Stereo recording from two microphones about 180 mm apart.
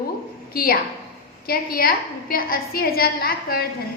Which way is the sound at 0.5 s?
55° left (ahead or behind).